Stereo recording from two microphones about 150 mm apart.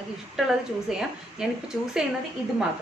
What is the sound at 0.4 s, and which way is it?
A woman's voice, 5° right (ahead or behind).